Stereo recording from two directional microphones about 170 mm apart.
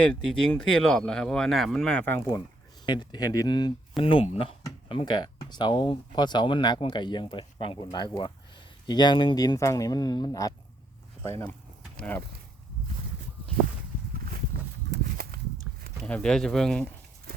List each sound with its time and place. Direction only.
0.0 s speech: 5° left (ahead or behind)
2.8 s speech: 25° left (ahead or behind); by 12.2 s 10° left (ahead or behind)
14.5 s a sound: 60° right (ahead or behind)
14.8 s walk: 65° right (ahead or behind)
16.0 s speech: 5° left (ahead or behind)